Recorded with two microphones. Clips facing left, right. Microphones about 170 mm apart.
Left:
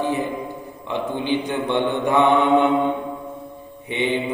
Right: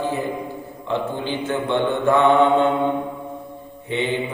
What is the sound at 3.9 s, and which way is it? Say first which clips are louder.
Mantra: even; 15° left (ahead or behind).